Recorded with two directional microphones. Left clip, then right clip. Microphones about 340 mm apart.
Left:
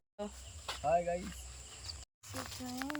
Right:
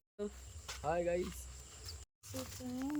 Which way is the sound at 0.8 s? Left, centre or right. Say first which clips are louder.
Left 4 dB; centre.